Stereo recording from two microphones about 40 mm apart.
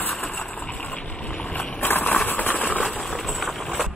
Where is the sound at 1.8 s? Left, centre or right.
Left.